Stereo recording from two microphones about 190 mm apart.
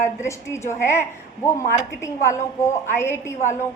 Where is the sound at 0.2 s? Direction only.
15° left (ahead or behind).